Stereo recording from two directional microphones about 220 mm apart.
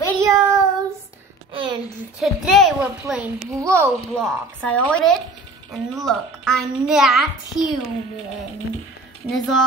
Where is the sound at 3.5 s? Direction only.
15° right (ahead or behind).